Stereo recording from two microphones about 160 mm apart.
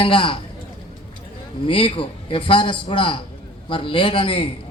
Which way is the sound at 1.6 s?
30° left (ahead or behind).